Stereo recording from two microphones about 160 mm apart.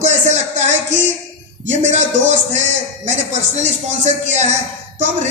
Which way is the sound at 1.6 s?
45° right (ahead or behind).